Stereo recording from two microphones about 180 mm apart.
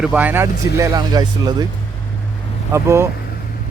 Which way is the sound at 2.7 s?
15° right (ahead or behind).